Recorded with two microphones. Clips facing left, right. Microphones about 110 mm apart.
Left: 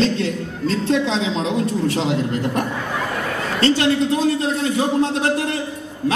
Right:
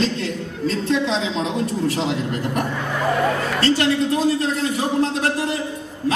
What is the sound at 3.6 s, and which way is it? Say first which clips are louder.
A woman's voice: left 3 dB; 25° left (ahead or behind).